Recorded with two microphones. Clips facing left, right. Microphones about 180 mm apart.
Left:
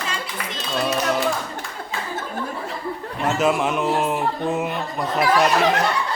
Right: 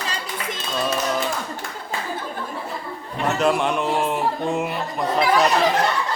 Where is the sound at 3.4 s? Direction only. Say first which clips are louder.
Even; 5° left (ahead or behind).